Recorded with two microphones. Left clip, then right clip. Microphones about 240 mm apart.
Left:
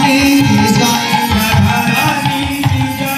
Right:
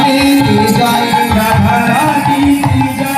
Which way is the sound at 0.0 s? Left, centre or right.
Right.